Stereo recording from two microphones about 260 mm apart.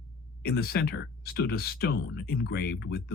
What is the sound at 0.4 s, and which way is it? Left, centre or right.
Speech, left.